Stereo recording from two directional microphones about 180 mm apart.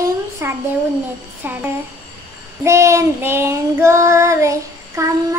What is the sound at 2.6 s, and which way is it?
Child singing, 15° right (ahead or behind).